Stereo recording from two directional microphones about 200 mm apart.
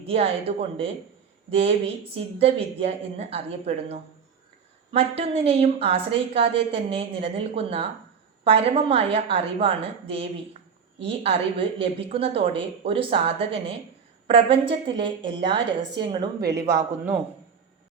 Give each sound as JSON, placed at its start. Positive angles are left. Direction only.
{"t": 0.0, "sound": "a woman's voice", "side_deg": -30}
{"t": 16.5, "sound": "a man's voice", "side_deg": -15}